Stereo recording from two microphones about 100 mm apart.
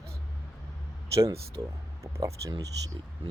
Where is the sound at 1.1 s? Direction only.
30° right (ahead or behind).